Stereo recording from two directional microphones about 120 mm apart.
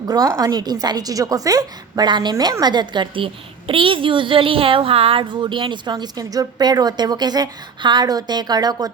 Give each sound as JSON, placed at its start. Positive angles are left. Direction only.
{"t": 0.1, "sound": "a woman's voice", "side_deg": -25}